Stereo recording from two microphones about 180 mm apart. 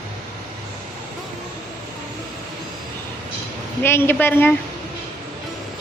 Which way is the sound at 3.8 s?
10° left (ahead or behind).